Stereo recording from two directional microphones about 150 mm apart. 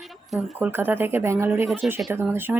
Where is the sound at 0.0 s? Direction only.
Centre (ahead or behind).